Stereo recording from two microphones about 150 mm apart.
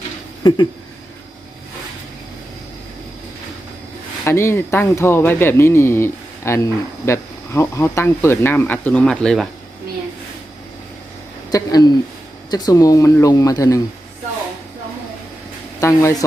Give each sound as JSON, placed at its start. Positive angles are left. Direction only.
{"t": 0.4, "sound": "speech", "side_deg": 30}
{"t": 4.2, "sound": "speech", "side_deg": 15}
{"t": 11.5, "sound": "speech", "side_deg": 25}
{"t": 15.8, "sound": "speech", "side_deg": 20}